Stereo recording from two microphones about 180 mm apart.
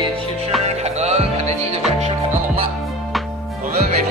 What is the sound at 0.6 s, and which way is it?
Music, 35° right (ahead or behind).